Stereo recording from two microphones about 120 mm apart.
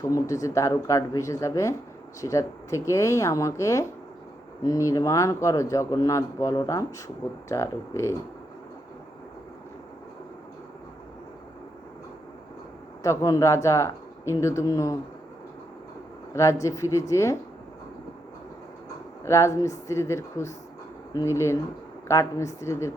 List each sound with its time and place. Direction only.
0.0 s speech: 25° left (ahead or behind)
13.0 s speech: 25° left (ahead or behind)
16.3 s speech: 25° left (ahead or behind)
19.2 s speech: 25° left (ahead or behind)